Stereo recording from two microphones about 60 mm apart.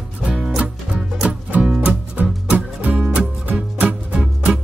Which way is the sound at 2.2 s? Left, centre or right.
Right.